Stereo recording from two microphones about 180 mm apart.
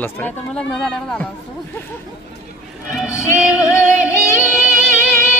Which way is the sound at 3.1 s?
15° left (ahead or behind).